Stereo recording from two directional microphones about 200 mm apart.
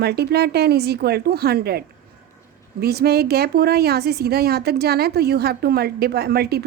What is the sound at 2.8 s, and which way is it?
Speech, 50° right (ahead or behind).